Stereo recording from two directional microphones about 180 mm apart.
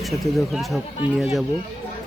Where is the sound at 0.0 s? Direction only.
Centre (ahead or behind).